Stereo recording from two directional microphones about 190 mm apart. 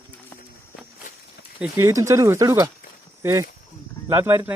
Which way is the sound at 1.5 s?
10° right (ahead or behind).